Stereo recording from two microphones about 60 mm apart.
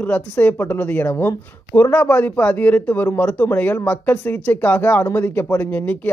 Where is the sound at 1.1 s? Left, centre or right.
Left.